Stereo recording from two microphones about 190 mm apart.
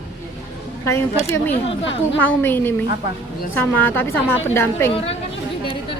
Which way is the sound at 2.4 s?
10° left (ahead or behind).